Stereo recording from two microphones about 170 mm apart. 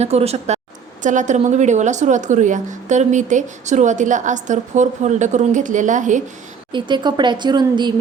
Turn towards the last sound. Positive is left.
turn(degrees=-25)  # may be behind; listen again after turning